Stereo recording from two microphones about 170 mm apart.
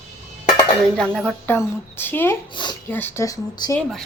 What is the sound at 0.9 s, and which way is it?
Speech, 5° left (ahead or behind).